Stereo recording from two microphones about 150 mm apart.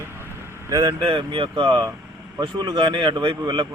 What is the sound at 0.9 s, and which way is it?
A man's voice, 35° right (ahead or behind).